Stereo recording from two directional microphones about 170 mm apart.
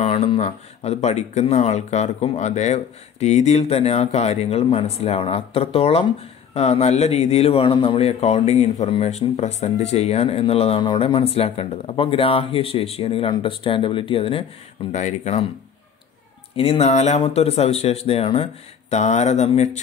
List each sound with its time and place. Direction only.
0.0 s speech: 40° left (ahead or behind)
14.9 s speech: 45° left (ahead or behind)
16.5 s speech: 35° left (ahead or behind)